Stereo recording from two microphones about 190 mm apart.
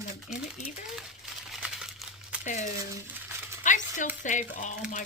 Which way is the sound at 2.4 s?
40° left (ahead or behind).